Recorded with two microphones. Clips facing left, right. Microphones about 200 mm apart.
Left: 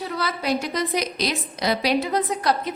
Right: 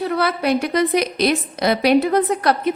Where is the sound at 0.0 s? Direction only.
55° right (ahead or behind).